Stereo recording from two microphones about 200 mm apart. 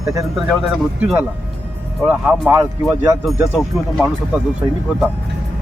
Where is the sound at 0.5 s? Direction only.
Centre (ahead or behind).